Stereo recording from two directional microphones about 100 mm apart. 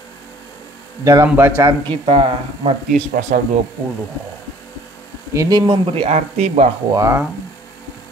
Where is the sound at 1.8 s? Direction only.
55° right (ahead or behind).